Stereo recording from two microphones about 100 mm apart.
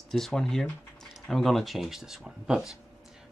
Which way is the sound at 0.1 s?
5° left (ahead or behind).